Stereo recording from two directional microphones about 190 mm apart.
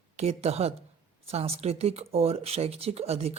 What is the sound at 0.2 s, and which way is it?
Speech, 35° right (ahead or behind).